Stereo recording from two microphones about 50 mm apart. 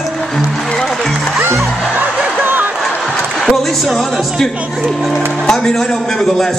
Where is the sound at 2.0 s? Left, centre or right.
Right.